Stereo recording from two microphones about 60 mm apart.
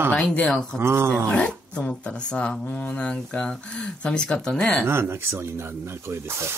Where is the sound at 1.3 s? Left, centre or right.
Centre.